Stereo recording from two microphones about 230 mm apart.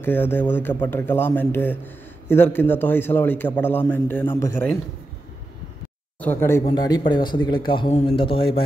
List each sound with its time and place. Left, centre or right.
0.0 s a man's voice: centre
6.1 s a man's voice: centre
6.6 s a man's voice: centre